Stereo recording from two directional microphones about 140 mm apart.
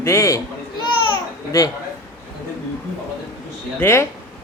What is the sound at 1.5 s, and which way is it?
Speech, 25° left (ahead or behind).